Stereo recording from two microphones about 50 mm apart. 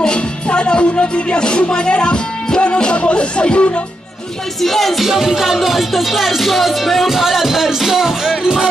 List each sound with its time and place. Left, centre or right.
0.0 s music: centre
4.6 s music: centre